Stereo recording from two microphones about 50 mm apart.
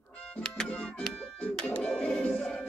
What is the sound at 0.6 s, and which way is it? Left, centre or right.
Music, centre.